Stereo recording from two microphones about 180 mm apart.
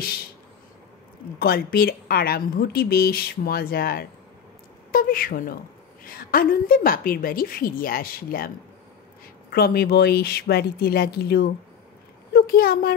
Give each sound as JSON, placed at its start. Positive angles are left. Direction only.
{"t": 1.4, "sound": "a woman's voice", "side_deg": 55}
{"t": 9.5, "sound": "a woman's voice", "side_deg": 60}